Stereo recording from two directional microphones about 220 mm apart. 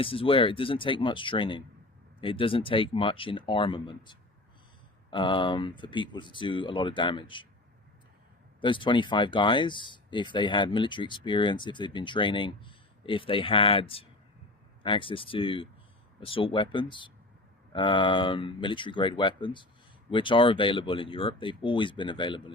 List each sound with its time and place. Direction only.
0.0 s speech: 25° left (ahead or behind)
8.6 s speech: 20° left (ahead or behind)